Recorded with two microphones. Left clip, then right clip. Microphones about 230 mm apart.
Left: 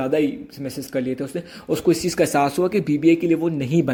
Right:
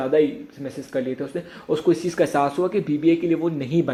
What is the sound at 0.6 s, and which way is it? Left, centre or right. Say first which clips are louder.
Speech: left 1 dB; left.